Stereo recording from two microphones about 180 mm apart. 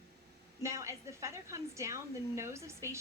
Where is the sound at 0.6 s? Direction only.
15° right (ahead or behind).